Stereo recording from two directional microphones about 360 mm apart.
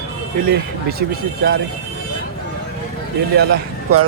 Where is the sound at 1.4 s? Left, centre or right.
Right.